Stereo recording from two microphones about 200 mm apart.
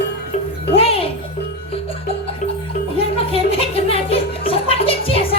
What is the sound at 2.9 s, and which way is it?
Music, 30° left (ahead or behind).